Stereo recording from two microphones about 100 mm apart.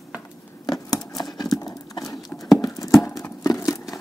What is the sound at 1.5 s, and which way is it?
Horse, 40° left (ahead or behind).